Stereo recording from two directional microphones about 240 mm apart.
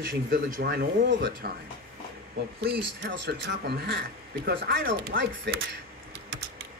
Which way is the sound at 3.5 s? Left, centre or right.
Right.